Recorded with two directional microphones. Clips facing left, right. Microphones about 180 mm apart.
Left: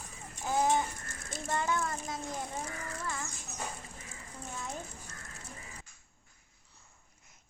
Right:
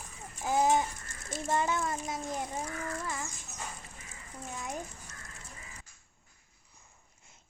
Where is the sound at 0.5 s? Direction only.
20° right (ahead or behind).